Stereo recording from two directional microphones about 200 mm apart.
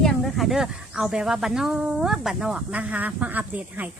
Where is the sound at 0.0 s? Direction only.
Centre (ahead or behind).